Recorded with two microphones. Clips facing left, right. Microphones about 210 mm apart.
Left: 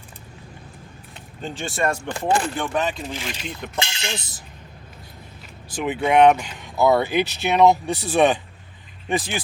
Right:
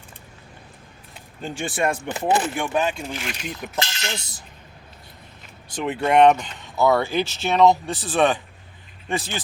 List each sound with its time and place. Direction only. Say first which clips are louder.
1.1 s speech: even; 10° right (ahead or behind)
4.0 s speech: left 1 dB; 20° left (ahead or behind)
5.7 s speech: even; centre (ahead or behind)